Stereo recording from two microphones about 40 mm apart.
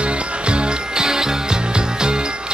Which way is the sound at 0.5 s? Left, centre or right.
Centre.